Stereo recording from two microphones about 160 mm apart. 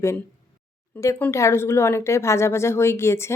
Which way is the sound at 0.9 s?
15° left (ahead or behind).